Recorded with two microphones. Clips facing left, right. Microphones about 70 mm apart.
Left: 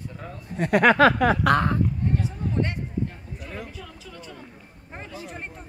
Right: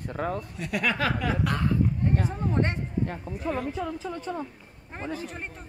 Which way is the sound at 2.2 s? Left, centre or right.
Right.